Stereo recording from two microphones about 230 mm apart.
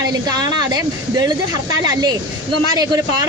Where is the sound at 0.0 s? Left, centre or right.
Centre.